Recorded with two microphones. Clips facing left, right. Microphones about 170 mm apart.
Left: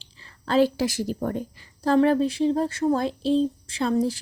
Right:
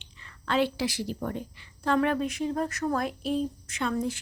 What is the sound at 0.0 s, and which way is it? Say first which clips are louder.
Speech: left 2 dB; 35° left (ahead or behind).